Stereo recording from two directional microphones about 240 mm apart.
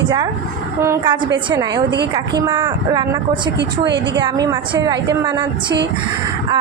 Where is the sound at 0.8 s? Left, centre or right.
Centre.